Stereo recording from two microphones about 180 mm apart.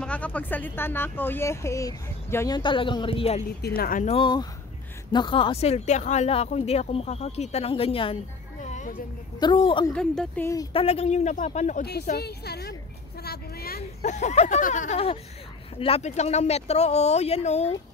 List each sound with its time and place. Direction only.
0.0 s speech: 5° left (ahead or behind); by 3.4 s 35° left (ahead or behind)
3.6 s a woman's voice: 55° left (ahead or behind)
4.0 s a woman's voice: 30° left (ahead or behind)
8.6 s a sound: 40° left (ahead or behind)
9.4 s a woman's voice: 30° left (ahead or behind)
9.9 s speech: 5° left (ahead or behind)
10.7 s speech: 35° left (ahead or behind)
11.8 s a woman's voice: 60° left (ahead or behind)
13.2 s a sound: 60° left (ahead or behind)
14.0 s speech: 40° left (ahead or behind)